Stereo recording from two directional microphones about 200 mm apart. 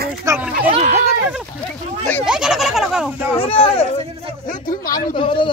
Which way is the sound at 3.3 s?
30° left (ahead or behind).